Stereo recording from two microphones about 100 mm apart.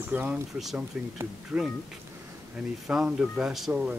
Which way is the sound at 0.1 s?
15° right (ahead or behind).